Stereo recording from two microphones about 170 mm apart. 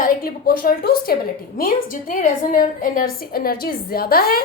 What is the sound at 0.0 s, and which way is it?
A woman's voice, 60° left (ahead or behind).